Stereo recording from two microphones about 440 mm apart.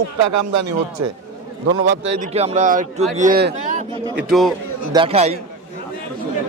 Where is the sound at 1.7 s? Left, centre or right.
Right.